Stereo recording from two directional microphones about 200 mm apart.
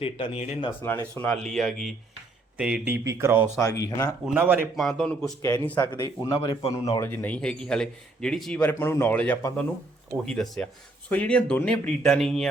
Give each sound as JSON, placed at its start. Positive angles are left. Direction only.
{"t": 0.0, "sound": "speech", "side_deg": 30}
{"t": 0.8, "sound": "a man's voice", "side_deg": 15}
{"t": 1.3, "sound": "speech", "side_deg": 5}
{"t": 3.6, "sound": "a man's voice", "side_deg": 15}
{"t": 4.4, "sound": "speech", "side_deg": -10}
{"t": 4.8, "sound": "speech", "side_deg": 0}
{"t": 5.4, "sound": "a man's voice", "side_deg": 15}
{"t": 5.9, "sound": "speech", "side_deg": 20}
{"t": 7.0, "sound": "a man's voice", "side_deg": 10}